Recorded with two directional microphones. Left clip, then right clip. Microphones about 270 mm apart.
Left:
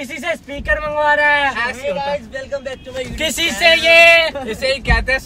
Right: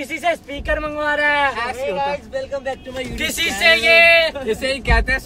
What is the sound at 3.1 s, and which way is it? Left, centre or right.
Speech, centre.